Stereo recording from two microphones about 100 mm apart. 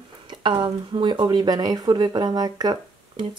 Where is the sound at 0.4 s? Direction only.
55° right (ahead or behind).